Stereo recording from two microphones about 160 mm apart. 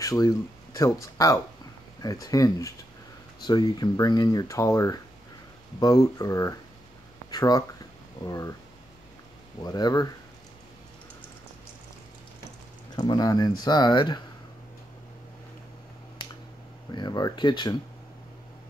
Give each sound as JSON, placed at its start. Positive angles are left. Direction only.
{"t": 0.0, "sound": "speech", "side_deg": 20}
{"t": 9.6, "sound": "speech", "side_deg": 25}
{"t": 12.9, "sound": "speech", "side_deg": 25}
{"t": 16.9, "sound": "speech", "side_deg": 25}